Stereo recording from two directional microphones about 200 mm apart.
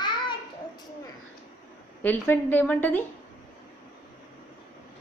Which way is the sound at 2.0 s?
10° left (ahead or behind).